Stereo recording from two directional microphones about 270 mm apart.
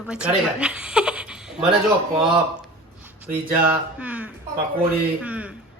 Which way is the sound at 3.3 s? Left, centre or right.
Centre.